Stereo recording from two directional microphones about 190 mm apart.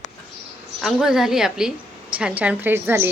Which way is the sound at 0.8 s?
Centre (ahead or behind).